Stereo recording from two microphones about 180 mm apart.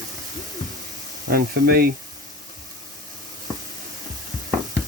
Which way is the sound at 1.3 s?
55° right (ahead or behind).